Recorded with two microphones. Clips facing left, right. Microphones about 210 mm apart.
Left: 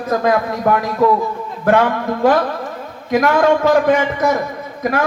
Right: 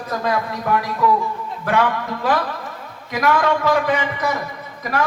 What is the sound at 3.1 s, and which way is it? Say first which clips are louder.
Speech: left 5 dB; 50° left (ahead or behind).